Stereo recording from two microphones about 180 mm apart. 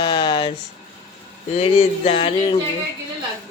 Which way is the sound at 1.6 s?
35° left (ahead or behind).